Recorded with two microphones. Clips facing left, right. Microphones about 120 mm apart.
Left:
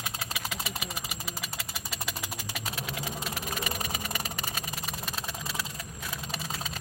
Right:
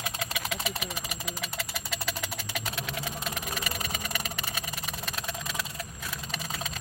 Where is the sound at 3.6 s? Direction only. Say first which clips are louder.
Left 1 dB; 15° left (ahead or behind).